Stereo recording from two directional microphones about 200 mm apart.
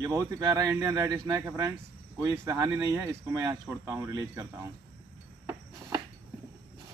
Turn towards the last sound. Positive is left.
turn(degrees=-15)  # may be behind; listen again after turning